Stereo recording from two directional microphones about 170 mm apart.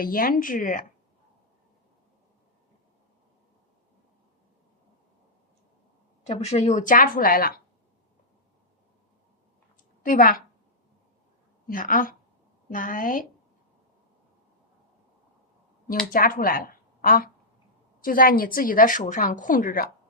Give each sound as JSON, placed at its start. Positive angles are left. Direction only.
{"t": 0.0, "sound": "a woman's voice", "side_deg": 60}
{"t": 6.2, "sound": "a woman's voice", "side_deg": 40}
{"t": 10.0, "sound": "a woman's voice", "side_deg": 55}
{"t": 11.7, "sound": "a woman's voice", "side_deg": 55}
{"t": 16.1, "sound": "a woman's voice", "side_deg": 55}